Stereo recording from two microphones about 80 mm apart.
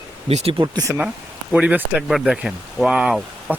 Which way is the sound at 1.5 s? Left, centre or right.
Centre.